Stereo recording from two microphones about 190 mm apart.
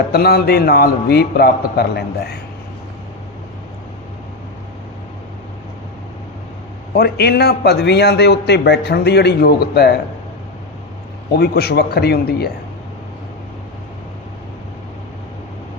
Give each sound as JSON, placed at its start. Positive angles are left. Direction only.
{"t": 0.1, "sound": "a man's voice", "side_deg": 55}
{"t": 6.9, "sound": "a man's voice", "side_deg": 55}
{"t": 11.3, "sound": "a man's voice", "side_deg": 55}